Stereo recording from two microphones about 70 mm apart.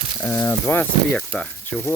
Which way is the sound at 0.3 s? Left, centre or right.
Left.